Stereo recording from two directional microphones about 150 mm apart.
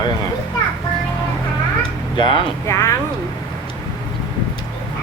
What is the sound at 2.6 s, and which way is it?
Speech, 20° left (ahead or behind).